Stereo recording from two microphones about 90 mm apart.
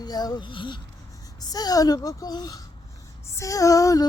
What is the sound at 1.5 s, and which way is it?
Speech, 45° left (ahead or behind).